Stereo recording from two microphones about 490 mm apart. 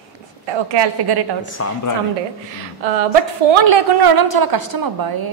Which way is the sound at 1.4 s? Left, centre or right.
Left.